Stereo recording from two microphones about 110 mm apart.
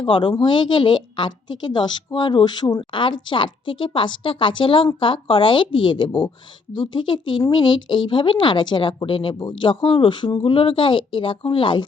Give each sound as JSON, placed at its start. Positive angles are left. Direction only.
{"t": 0.0, "sound": "speech", "side_deg": 45}